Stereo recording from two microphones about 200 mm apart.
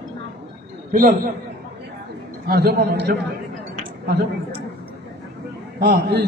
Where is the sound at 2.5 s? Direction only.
50° right (ahead or behind).